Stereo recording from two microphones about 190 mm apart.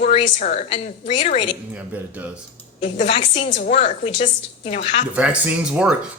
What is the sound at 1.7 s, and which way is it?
Speech, 10° right (ahead or behind).